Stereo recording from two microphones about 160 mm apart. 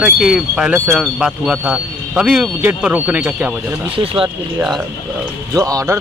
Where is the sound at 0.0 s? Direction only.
5° right (ahead or behind).